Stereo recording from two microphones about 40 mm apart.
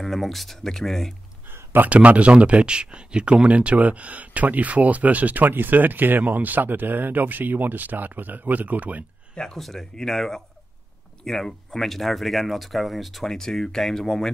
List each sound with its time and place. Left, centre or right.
0.0 s speech: centre
1.9 s speech: right
9.3 s speech: centre
13.2 s speech: centre